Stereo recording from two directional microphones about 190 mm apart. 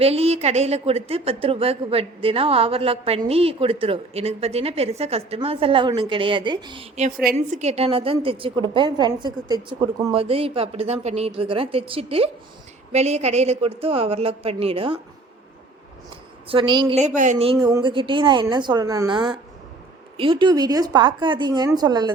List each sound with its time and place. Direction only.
0.0 s a woman's voice: 35° right (ahead or behind)
7.3 s a woman's voice: 35° right (ahead or behind)
16.5 s a woman's voice: 25° right (ahead or behind)